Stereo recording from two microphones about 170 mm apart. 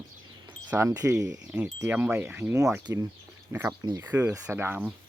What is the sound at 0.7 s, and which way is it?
Speech, 15° right (ahead or behind).